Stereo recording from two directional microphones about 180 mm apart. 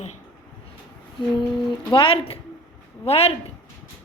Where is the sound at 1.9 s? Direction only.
30° left (ahead or behind).